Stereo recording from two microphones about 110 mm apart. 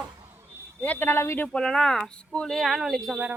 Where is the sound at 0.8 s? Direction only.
20° left (ahead or behind).